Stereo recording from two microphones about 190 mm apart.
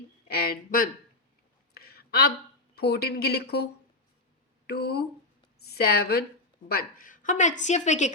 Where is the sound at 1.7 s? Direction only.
55° left (ahead or behind).